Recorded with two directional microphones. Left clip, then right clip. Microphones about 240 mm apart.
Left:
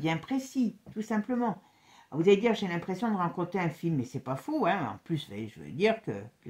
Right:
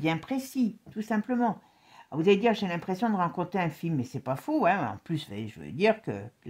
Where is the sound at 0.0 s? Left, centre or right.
Right.